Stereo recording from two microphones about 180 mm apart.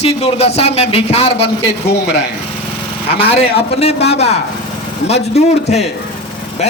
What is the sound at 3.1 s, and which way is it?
Speech, 35° left (ahead or behind).